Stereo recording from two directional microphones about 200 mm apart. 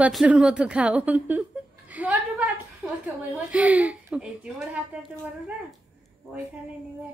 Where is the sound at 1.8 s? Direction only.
5° right (ahead or behind).